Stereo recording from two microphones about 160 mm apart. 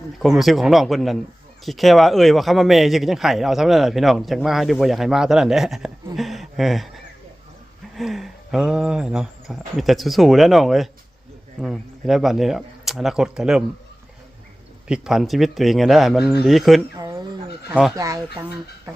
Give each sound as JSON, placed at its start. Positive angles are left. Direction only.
{"t": 0.2, "sound": "speech", "side_deg": 0}
{"t": 14.8, "sound": "speech", "side_deg": -5}
{"t": 17.0, "sound": "fowl", "side_deg": -20}
{"t": 17.9, "sound": "speech", "side_deg": -20}